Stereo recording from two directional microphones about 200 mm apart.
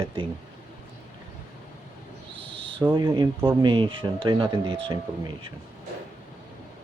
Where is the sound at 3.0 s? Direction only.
15° right (ahead or behind).